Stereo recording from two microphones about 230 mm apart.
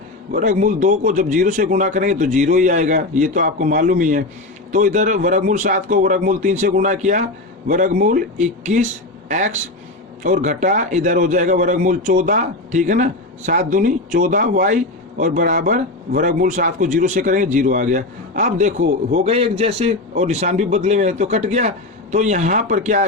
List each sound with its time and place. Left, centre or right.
0.3 s a man's voice: right